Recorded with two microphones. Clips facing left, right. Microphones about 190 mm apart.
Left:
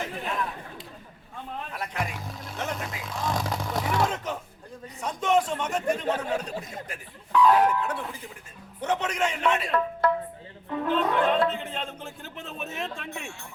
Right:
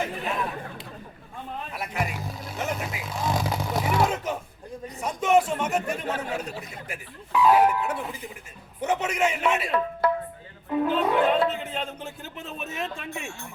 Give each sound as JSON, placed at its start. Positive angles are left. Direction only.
{"t": 1.7, "sound": "vehicle", "side_deg": -5}
{"t": 4.9, "sound": "speech", "side_deg": -10}
{"t": 6.6, "sound": "speech", "side_deg": 45}
{"t": 6.8, "sound": "speech", "side_deg": -10}